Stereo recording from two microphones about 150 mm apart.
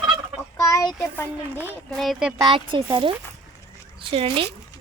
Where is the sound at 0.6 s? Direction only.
20° left (ahead or behind).